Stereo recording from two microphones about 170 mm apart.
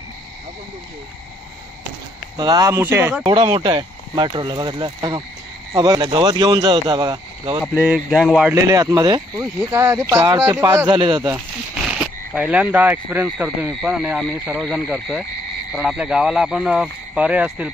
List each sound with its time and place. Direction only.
2.3 s speech: 25° right (ahead or behind)
3.3 s speech: 25° right (ahead or behind)
7.7 s speech: 5° right (ahead or behind)
8.6 s speech: 20° right (ahead or behind)
10.9 s speech: 30° right (ahead or behind)
11.3 s a sound: 5° right (ahead or behind)
12.4 s speech: 10° right (ahead or behind)